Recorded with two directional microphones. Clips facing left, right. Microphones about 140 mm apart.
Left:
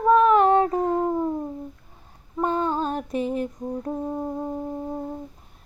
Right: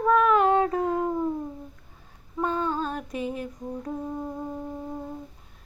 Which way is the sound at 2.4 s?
30° left (ahead or behind).